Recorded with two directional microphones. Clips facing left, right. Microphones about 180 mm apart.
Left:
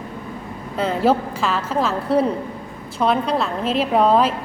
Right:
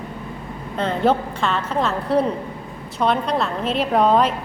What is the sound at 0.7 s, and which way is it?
A woman's voice, 5° left (ahead or behind).